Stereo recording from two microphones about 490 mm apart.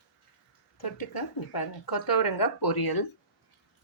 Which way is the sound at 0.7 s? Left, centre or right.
Left.